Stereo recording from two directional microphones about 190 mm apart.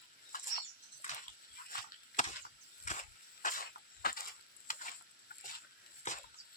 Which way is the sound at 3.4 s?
50° left (ahead or behind).